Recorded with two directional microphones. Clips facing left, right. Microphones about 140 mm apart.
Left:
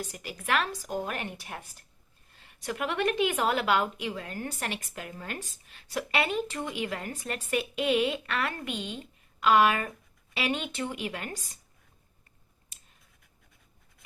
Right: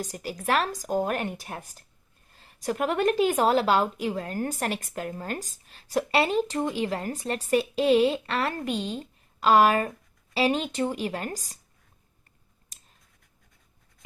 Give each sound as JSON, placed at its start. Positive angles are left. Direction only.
{"t": 0.0, "sound": "a woman's voice", "side_deg": -40}